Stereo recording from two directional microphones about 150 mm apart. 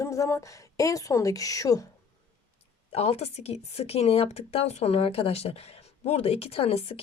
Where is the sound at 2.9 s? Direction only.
45° left (ahead or behind).